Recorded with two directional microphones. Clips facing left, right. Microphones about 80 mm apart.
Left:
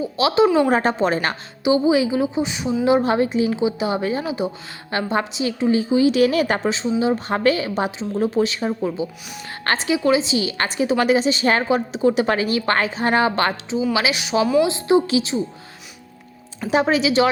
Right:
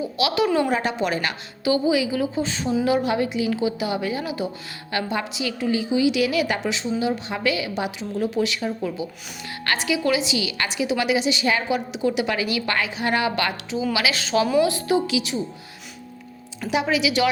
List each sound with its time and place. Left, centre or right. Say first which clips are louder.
0.0 s a woman's voice: left 5 dB; left
0.7 s a woman's voice: left 5 dB; left
1.6 s a woman's voice: left 4 dB; left
2.8 s a woman's voice: left 6 dB; left
7.3 s a woman's voice: left 5 dB; left
16.6 s a woman's voice: left 4 dB; left